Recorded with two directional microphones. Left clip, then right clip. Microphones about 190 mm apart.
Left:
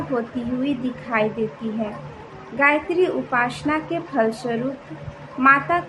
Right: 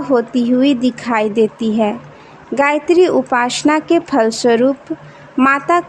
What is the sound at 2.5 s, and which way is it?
A woman's voice, 65° right (ahead or behind).